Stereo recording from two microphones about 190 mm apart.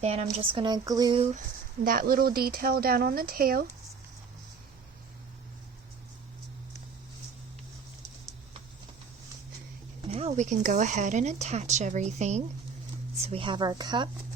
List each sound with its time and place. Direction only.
0.0 s speech: 35° right (ahead or behind)
1.8 s speech: 50° right (ahead or behind)
10.1 s a woman's voice: 30° right (ahead or behind)